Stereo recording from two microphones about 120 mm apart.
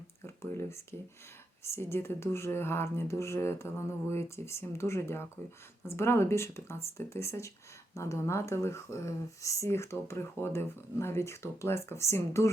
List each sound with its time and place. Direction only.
0.3 s speech: 20° left (ahead or behind)